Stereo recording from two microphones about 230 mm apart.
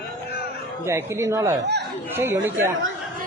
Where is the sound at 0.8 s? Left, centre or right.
Centre.